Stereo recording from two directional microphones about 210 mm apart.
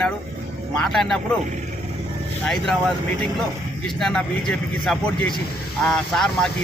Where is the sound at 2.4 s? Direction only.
Centre (ahead or behind).